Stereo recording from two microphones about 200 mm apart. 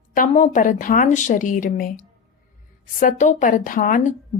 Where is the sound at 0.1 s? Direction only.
40° left (ahead or behind).